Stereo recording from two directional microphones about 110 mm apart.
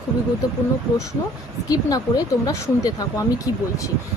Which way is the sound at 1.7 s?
35° left (ahead or behind).